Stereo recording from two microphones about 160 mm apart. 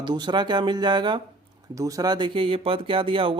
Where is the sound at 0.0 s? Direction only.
30° right (ahead or behind).